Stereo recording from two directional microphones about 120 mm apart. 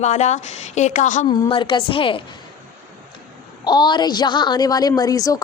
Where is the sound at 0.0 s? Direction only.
75° left (ahead or behind); by 1.3 s 90° left.